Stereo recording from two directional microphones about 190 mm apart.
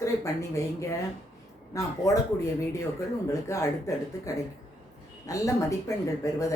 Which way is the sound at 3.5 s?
15° left (ahead or behind).